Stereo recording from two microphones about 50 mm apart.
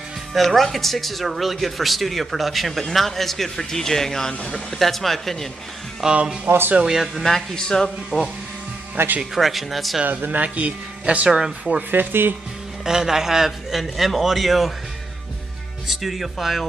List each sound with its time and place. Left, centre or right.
0.3 s speech: centre
6.0 s speech: centre
6.4 s speech: right
7.2 s speech: centre
8.9 s speech: right
9.2 s speech: centre
10.2 s speech: right
11.2 s speech: centre
11.9 s speech: right
12.8 s speech: centre
15.9 s speech: centre